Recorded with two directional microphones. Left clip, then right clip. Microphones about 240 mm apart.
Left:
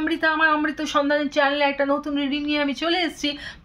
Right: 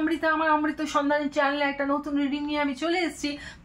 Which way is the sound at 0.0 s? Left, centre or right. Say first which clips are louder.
Left 4 dB; left.